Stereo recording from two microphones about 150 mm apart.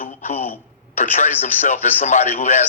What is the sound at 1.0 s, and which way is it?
A man's voice, 50° left (ahead or behind).